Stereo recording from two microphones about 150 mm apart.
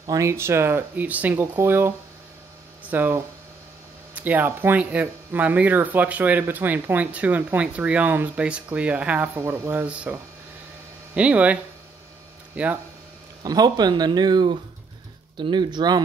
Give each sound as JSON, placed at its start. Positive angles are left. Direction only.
{"t": 0.0, "sound": "speech", "side_deg": -20}
{"t": 12.6, "sound": "speech", "side_deg": -10}
{"t": 13.4, "sound": "speech", "side_deg": -25}